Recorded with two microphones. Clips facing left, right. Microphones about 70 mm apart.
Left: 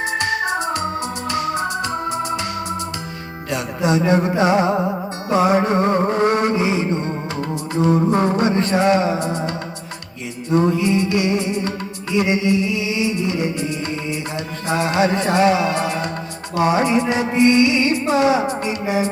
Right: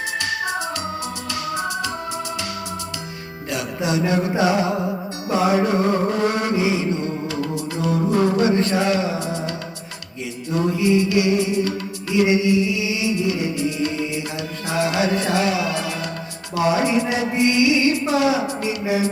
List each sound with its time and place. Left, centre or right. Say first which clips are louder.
0.0 s organ: left 4 dB; left
3.5 s music: left 3 dB; left
10.5 s music: left 2 dB; left